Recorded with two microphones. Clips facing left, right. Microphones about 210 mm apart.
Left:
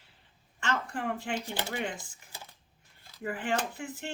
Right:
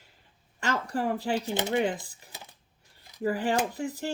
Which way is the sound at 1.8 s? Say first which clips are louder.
Right 8 dB; 35° right (ahead or behind).